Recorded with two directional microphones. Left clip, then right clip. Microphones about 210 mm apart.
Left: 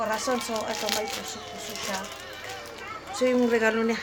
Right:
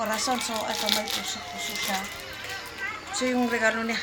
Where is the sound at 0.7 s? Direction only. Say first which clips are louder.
Right 4 dB; 10° left (ahead or behind).